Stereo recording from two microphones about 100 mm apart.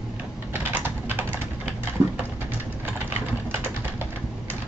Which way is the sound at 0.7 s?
20° right (ahead or behind).